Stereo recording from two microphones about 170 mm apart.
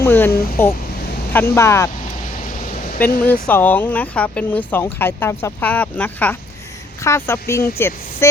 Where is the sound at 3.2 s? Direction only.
10° left (ahead or behind).